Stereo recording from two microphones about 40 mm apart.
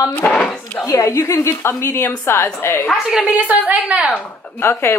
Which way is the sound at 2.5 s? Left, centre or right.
Left.